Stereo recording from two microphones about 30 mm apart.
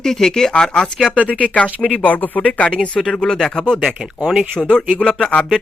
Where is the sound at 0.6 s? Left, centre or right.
Left.